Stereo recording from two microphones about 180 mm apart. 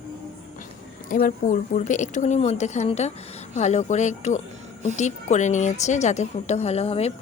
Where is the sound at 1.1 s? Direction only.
50° left (ahead or behind).